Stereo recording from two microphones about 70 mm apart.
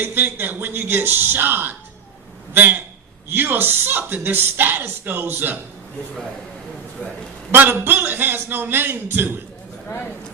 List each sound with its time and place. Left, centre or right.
0.0 s a man's voice: right
7.5 s speech: right